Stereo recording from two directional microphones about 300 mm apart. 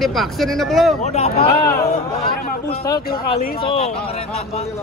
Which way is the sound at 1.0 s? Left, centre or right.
Left.